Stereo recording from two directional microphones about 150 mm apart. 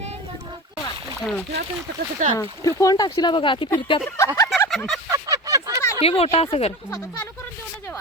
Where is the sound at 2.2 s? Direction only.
55° right (ahead or behind).